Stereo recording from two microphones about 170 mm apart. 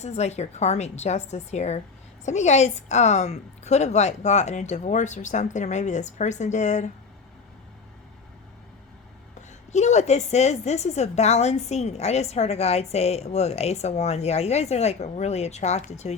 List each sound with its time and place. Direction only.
0.0 s a woman's voice: 40° left (ahead or behind)
9.7 s a woman's voice: 45° left (ahead or behind)